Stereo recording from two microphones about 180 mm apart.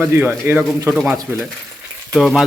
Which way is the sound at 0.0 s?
10° right (ahead or behind).